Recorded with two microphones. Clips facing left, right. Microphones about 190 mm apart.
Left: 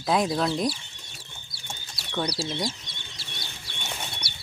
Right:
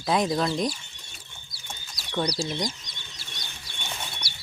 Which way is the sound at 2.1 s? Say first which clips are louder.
Right 1 dB; 5° left (ahead or behind).